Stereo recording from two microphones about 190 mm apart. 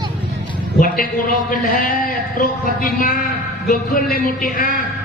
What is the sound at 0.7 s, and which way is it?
A man's voice, 45° left (ahead or behind).